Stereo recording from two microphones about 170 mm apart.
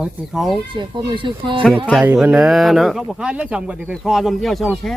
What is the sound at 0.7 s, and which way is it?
Speech, 30° right (ahead or behind).